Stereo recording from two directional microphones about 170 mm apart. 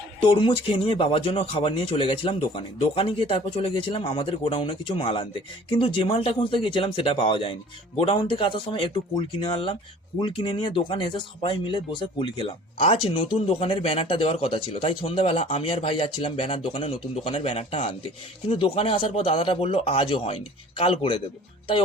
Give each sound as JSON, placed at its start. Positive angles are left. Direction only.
{"t": 0.2, "sound": "speech", "side_deg": 30}
{"t": 18.4, "sound": "speech", "side_deg": 30}